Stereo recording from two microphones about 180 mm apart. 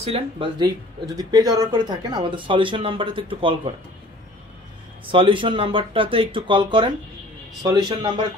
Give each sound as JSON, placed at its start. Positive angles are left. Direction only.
{"t": 0.0, "sound": "speech", "side_deg": -30}
{"t": 5.0, "sound": "speech", "side_deg": -30}